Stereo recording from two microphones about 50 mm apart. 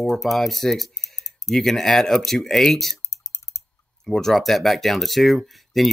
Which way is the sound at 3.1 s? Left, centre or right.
Left.